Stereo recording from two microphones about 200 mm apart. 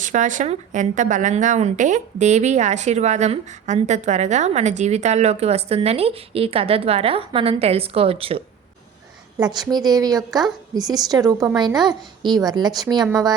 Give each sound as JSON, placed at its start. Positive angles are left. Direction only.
{"t": 0.0, "sound": "a woman's voice", "side_deg": -40}
{"t": 9.4, "sound": "speech", "side_deg": -20}